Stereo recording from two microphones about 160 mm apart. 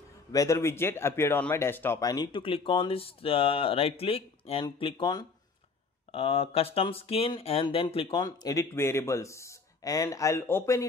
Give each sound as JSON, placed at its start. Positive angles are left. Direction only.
{"t": 0.3, "sound": "speech", "side_deg": 20}
{"t": 8.2, "sound": "speech", "side_deg": 25}